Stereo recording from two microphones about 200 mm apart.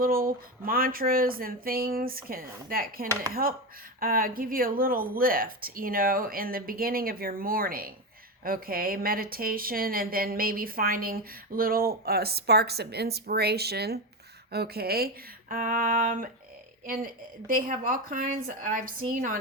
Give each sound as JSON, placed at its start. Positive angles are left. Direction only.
{"t": 0.0, "sound": "a woman's voice", "side_deg": -45}